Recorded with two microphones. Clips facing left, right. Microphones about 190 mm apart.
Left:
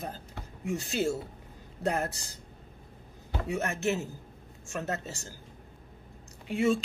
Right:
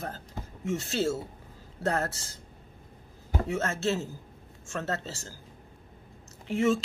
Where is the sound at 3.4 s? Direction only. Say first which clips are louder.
Even; 15° left (ahead or behind).